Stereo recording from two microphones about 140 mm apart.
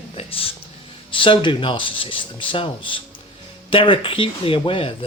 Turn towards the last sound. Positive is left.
turn(degrees=40)  # may be behind; listen again after turning